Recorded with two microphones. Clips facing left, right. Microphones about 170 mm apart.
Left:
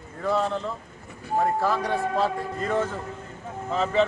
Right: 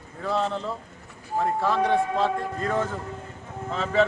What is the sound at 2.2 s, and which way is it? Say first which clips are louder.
A woman's voice: right 1 dB; centre (ahead or behind).